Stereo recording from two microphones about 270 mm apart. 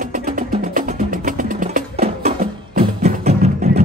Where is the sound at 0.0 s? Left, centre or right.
Right.